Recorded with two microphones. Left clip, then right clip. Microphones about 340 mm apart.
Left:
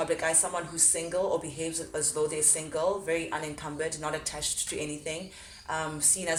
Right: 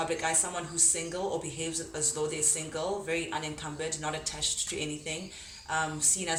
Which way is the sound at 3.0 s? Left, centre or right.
Centre.